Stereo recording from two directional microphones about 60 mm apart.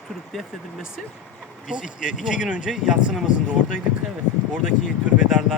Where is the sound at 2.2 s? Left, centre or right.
Centre.